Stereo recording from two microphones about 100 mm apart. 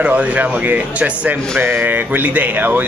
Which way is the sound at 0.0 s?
15° right (ahead or behind).